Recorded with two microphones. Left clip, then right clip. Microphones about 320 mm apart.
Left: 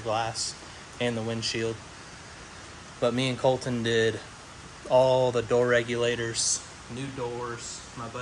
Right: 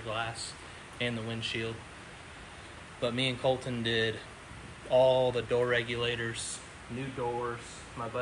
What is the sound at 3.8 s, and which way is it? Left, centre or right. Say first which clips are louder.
Speech: left 7 dB; left.